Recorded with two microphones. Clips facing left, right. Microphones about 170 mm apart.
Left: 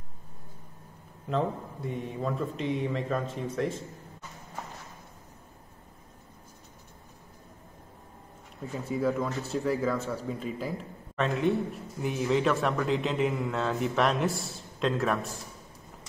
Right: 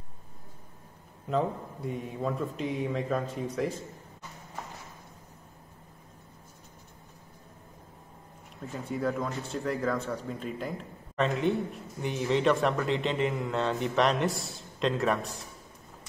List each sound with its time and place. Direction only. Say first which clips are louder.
1.3 s speech: even; centre (ahead or behind)
8.7 s speech: left 2 dB; centre (ahead or behind)